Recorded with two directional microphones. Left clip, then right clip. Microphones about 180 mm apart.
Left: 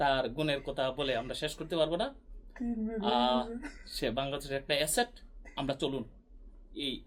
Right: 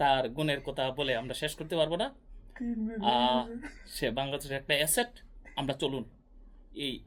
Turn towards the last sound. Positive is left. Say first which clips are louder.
# right 1 dB
turn(degrees=-40)  # may be behind; listen again after turning